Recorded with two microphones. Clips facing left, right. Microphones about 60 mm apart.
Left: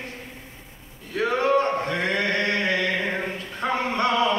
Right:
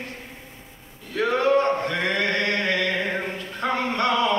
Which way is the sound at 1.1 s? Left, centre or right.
Left.